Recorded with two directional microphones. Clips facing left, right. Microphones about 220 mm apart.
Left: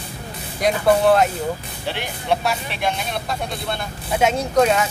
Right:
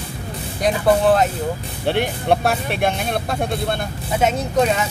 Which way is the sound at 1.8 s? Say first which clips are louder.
Right 9 dB; 55° right (ahead or behind).